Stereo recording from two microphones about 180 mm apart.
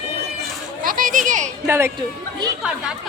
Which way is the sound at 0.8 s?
50° right (ahead or behind).